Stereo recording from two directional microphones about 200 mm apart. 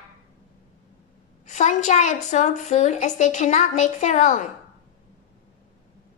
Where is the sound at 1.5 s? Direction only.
35° left (ahead or behind).